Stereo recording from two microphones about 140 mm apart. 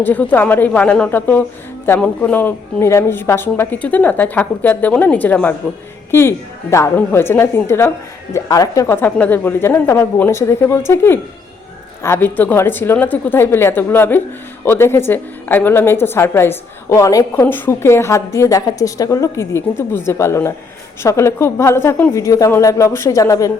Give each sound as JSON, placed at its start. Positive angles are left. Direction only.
{"t": 0.0, "sound": "a woman's voice", "side_deg": 10}